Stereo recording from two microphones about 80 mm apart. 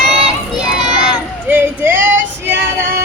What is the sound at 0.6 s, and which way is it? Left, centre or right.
Child singing, centre.